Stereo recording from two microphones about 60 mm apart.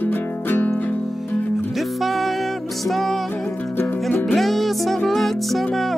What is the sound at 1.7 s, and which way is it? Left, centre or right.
Music, centre.